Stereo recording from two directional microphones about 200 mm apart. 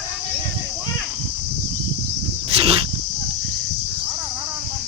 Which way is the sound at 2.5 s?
30° right (ahead or behind).